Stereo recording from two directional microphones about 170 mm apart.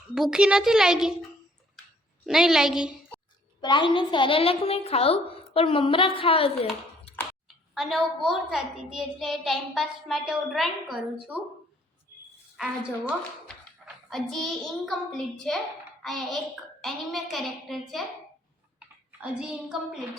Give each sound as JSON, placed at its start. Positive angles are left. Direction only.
{"t": 0.1, "sound": "a child's voice", "side_deg": -5}
{"t": 2.2, "sound": "a child's voice", "side_deg": -5}
{"t": 3.6, "sound": "a woman's voice", "side_deg": 30}
{"t": 7.7, "sound": "a child's voice", "side_deg": 0}
{"t": 13.8, "sound": "a child's voice", "side_deg": 0}
{"t": 19.2, "sound": "a child's voice", "side_deg": -5}